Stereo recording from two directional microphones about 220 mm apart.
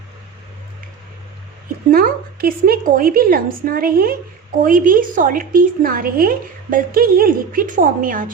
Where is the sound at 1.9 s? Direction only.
40° right (ahead or behind).